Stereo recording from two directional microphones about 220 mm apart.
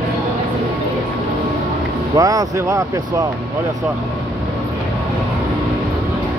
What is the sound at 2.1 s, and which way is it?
Speech, 15° right (ahead or behind).